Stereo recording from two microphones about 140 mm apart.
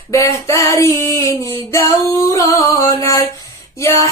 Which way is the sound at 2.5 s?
25° left (ahead or behind).